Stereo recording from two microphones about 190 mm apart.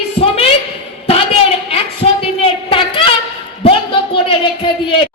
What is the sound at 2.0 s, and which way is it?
Speech, 30° left (ahead or behind).